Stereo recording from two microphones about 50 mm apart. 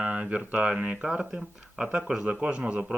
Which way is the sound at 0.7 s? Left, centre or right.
Centre.